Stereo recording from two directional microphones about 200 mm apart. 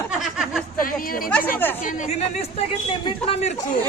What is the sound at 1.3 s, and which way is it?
Speech, 10° left (ahead or behind).